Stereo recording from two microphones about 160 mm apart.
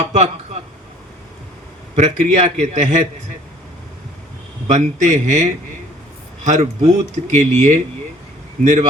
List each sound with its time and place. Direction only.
0.1 s a sound: 40° right (ahead or behind)
2.0 s speech: 45° right (ahead or behind)
4.7 s speech: 50° right (ahead or behind)